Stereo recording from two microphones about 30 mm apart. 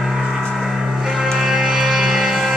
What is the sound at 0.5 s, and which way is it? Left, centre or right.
Vehicle, centre.